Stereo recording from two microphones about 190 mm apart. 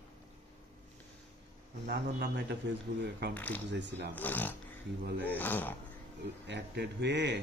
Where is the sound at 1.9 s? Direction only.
60° right (ahead or behind).